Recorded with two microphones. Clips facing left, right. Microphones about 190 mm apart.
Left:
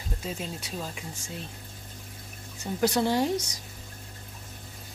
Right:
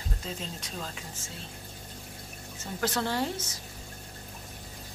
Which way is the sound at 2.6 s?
15° left (ahead or behind).